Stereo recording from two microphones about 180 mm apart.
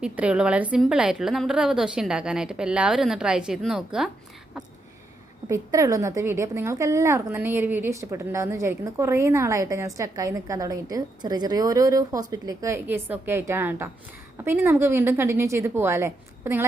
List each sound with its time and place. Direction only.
0.0 s a woman's voice: 5° right (ahead or behind)
5.5 s a woman's voice: 15° right (ahead or behind)